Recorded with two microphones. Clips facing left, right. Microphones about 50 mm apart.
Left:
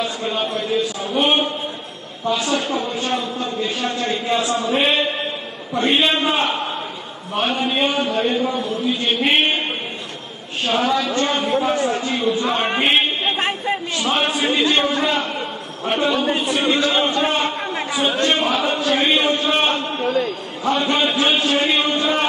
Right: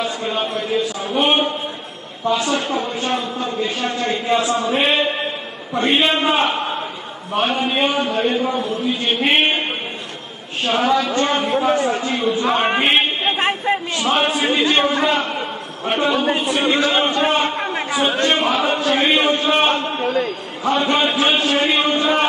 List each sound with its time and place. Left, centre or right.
0.0 s a sound: centre
2.6 s a man's voice: centre
4.3 s a man's voice: right
10.7 s a man's voice: centre
11.4 s a man's voice: centre
17.4 s a sound: centre
18.2 s a man's voice: centre